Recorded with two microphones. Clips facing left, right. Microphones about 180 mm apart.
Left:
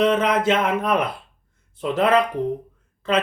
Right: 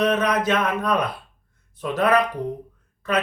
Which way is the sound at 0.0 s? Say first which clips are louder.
Left 2 dB; 25° left (ahead or behind).